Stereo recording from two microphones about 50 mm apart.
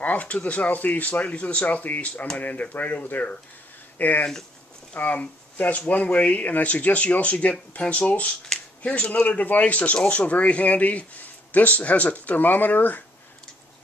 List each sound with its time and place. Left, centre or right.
0.0 s speech: left
8.5 s a sound: centre
8.8 s speech: left